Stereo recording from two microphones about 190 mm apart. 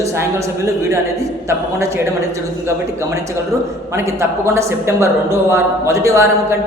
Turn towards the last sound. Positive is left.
turn(degrees=-15)  # may be behind; listen again after turning